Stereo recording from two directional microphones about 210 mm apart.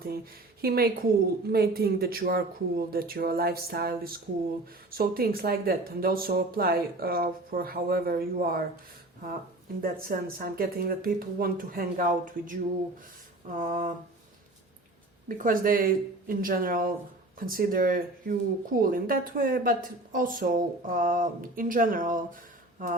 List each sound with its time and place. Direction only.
0.6 s speech: 45° right (ahead or behind)
9.8 s speech: 45° right (ahead or behind)
15.3 s speech: 40° right (ahead or behind)